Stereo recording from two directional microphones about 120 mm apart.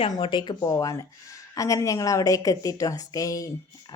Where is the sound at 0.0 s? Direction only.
45° left (ahead or behind).